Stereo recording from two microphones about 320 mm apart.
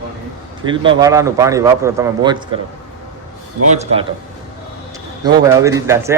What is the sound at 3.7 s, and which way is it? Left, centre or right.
Speech, right.